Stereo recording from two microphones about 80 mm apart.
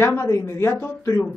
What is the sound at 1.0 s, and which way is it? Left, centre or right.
Speech, left.